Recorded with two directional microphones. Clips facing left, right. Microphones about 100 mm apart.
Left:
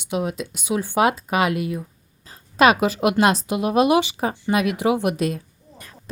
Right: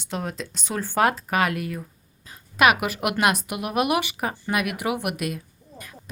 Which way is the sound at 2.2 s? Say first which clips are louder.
Left 3 dB; 30° left (ahead or behind).